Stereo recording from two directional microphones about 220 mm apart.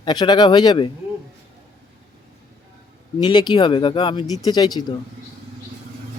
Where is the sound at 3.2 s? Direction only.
20° left (ahead or behind).